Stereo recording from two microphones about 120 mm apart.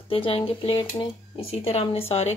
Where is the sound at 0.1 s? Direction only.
50° left (ahead or behind).